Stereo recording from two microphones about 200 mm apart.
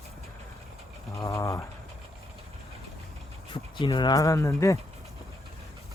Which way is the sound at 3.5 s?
25° left (ahead or behind).